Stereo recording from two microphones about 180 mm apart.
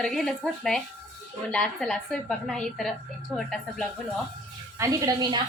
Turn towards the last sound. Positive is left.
turn(degrees=-20)  # may be behind; listen again after turning